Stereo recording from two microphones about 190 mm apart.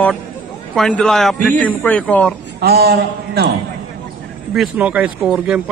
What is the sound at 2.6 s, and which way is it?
Speech, 55° right (ahead or behind).